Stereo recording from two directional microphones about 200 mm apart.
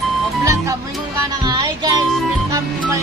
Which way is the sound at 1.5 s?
20° right (ahead or behind).